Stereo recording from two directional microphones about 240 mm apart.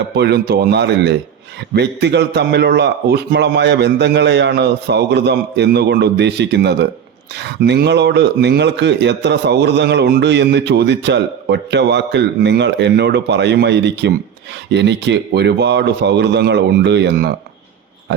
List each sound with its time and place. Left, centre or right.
0.1 s speech: right